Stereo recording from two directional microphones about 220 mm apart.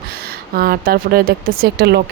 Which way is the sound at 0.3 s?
45° right (ahead or behind).